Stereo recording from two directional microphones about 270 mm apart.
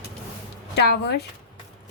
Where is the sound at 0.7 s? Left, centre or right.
Left.